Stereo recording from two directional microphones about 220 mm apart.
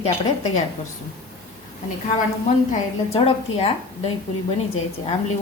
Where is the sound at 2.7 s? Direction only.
30° left (ahead or behind).